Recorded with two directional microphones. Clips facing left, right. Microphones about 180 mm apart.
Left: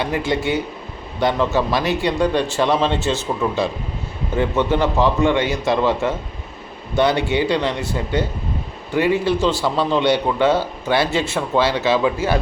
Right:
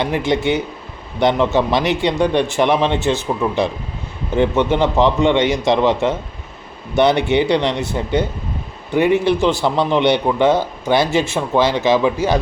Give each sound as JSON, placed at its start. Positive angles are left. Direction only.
{"t": 0.0, "sound": "a man's voice", "side_deg": -20}
{"t": 4.4, "sound": "a man's voice", "side_deg": -20}